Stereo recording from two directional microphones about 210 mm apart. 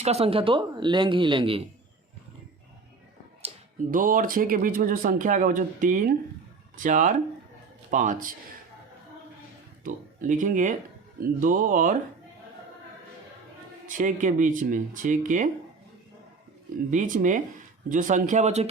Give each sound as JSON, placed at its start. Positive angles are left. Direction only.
{"t": 0.0, "sound": "speech", "side_deg": -30}
{"t": 3.4, "sound": "speech", "side_deg": -40}
{"t": 9.8, "sound": "speech", "side_deg": -40}
{"t": 13.8, "sound": "speech", "side_deg": -40}
{"t": 16.9, "sound": "speech", "side_deg": -35}